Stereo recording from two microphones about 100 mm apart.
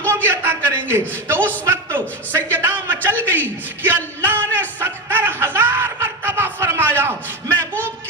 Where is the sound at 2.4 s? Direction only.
20° right (ahead or behind).